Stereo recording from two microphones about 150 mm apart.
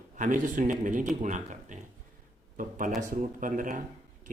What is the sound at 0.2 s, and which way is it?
Speech, 60° right (ahead or behind).